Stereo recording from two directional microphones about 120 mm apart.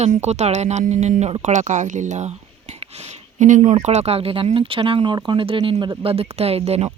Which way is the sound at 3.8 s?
65° right (ahead or behind).